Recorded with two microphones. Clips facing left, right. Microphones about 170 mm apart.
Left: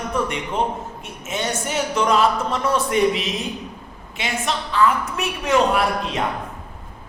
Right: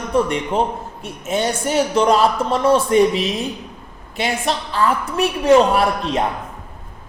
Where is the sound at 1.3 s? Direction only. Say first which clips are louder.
Right 5 dB; 35° right (ahead or behind).